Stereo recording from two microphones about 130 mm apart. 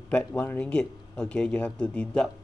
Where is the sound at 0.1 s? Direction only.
15° left (ahead or behind).